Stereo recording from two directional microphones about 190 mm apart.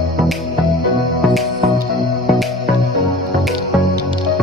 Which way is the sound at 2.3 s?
Centre (ahead or behind).